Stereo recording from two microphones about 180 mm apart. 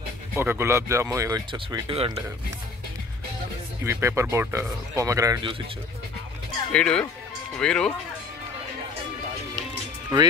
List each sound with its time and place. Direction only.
0.3 s speech: 15° right (ahead or behind)
3.8 s speech: 15° right (ahead or behind)
6.7 s speech: 5° left (ahead or behind)